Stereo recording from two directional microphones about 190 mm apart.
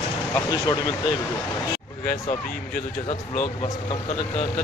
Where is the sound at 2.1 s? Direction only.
50° left (ahead or behind).